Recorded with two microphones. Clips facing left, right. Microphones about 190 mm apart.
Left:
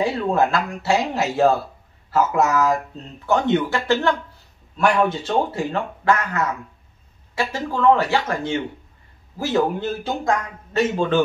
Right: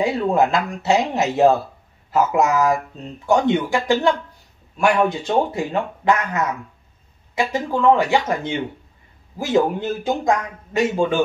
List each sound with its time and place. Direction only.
0.0 s a man's voice: 20° right (ahead or behind)